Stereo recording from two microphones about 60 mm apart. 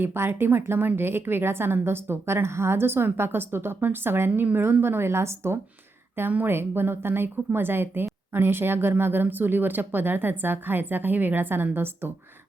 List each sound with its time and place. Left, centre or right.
0.0 s a woman's voice: right
6.1 s a woman's voice: right